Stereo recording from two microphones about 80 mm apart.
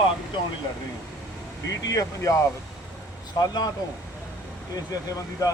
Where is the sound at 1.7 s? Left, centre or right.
Left.